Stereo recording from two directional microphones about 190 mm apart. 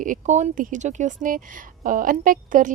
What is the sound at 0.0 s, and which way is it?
A woman's voice, 40° right (ahead or behind).